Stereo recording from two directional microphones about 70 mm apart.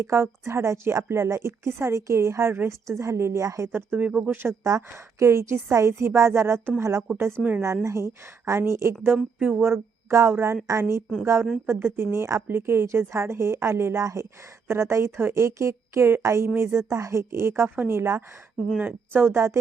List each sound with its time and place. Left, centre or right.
0.0 s a woman's voice: right
3.7 s speech: right
4.3 s a woman's voice: right
9.1 s speech: centre
9.6 s a woman's voice: right